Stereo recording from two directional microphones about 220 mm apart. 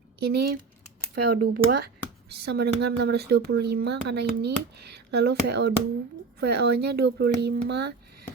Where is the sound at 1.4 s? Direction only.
45° right (ahead or behind).